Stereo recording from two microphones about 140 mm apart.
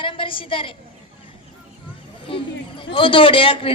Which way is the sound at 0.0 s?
40° left (ahead or behind).